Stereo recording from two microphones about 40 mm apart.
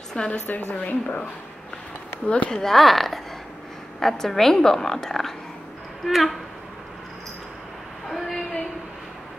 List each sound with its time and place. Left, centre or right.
0.3 s a woman's voice: left
2.2 s speech: left
2.5 s a woman's voice: centre
6.0 s speech: centre
8.1 s a sound: centre